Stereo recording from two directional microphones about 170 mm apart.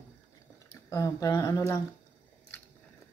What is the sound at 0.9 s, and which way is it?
Speech, 20° left (ahead or behind).